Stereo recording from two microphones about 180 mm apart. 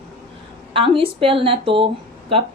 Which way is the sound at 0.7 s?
30° right (ahead or behind).